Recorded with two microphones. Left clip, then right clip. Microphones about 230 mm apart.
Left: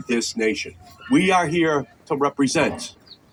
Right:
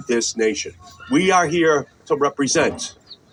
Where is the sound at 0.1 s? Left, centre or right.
Left.